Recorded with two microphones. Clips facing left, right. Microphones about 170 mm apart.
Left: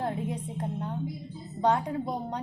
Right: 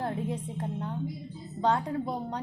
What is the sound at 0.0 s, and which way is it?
Music, 20° left (ahead or behind).